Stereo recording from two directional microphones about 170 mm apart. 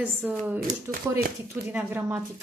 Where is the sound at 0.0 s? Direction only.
10° right (ahead or behind).